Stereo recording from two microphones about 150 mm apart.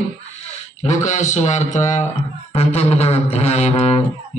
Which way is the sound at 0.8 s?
55° left (ahead or behind).